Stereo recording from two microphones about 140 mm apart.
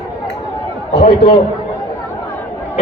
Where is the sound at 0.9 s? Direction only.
45° left (ahead or behind).